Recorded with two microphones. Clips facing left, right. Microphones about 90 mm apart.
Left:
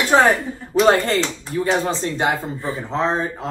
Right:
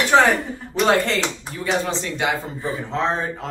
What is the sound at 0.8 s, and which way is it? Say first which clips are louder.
Speech: left 1 dB; 40° left (ahead or behind).